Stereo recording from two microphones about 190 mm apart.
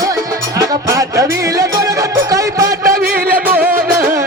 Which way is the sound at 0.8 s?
15° right (ahead or behind).